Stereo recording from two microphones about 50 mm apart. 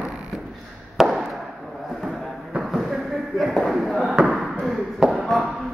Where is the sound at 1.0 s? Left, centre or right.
Centre.